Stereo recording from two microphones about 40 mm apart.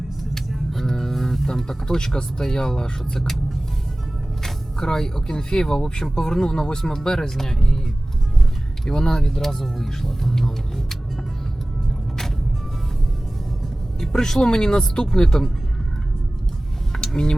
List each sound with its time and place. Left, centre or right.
0.3 s music: centre
2.4 s speech: centre
3.2 s vehicle: centre
4.4 s speech: centre
8.9 s speech: centre
14.0 s speech: centre
16.9 s a sound: left